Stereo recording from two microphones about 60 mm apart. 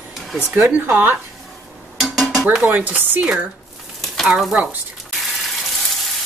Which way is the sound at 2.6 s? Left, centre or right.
Right.